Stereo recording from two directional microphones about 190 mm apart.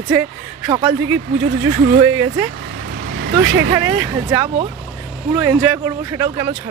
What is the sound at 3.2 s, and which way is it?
Speech, 75° right (ahead or behind).